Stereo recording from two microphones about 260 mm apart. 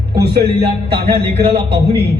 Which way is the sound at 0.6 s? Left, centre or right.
Right.